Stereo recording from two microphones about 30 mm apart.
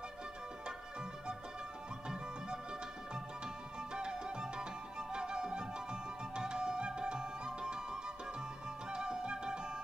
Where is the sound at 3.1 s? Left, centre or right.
Right.